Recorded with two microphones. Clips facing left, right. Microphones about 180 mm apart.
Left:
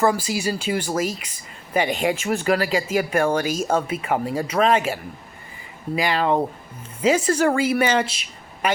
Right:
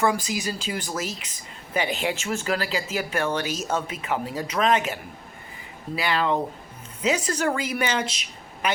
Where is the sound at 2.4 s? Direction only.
55° left (ahead or behind).